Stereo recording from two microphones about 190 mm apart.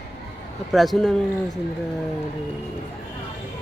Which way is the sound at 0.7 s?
Centre (ahead or behind).